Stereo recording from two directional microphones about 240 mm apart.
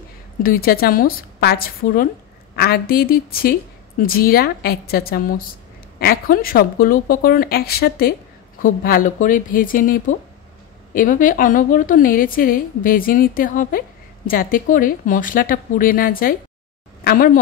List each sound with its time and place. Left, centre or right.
0.4 s a woman's voice: left